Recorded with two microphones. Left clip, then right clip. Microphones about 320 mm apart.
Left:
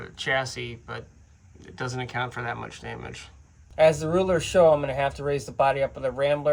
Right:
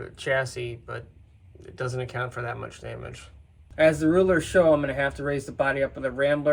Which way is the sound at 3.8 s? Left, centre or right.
Left.